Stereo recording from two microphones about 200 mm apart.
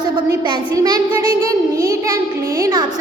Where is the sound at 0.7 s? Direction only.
20° right (ahead or behind).